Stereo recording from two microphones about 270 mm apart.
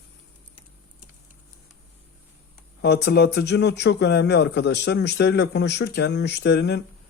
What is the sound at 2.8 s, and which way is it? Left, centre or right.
Speech, left.